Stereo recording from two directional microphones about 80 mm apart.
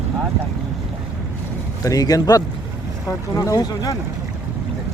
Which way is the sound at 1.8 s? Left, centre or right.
Left.